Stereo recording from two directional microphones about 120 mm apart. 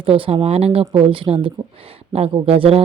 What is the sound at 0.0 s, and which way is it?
A woman's voice, 50° right (ahead or behind).